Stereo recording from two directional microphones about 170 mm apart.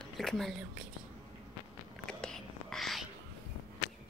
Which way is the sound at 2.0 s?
5° left (ahead or behind).